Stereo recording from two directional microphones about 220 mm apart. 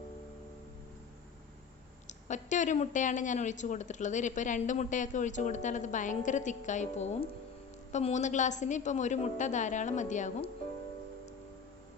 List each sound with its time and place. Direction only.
2.0 s speech: 35° left (ahead or behind)